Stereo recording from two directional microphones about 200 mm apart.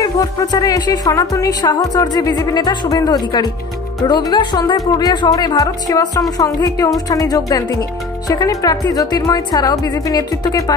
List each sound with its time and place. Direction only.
0.0 s speech: 20° left (ahead or behind)